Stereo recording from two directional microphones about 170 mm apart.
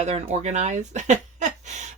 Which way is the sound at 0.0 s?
40° right (ahead or behind).